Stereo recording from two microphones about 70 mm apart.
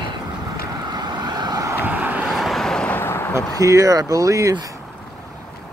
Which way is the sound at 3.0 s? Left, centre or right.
Left.